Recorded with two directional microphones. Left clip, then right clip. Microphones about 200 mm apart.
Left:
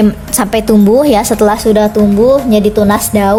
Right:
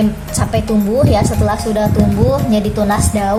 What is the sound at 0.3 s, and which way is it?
A woman's voice, 55° left (ahead or behind).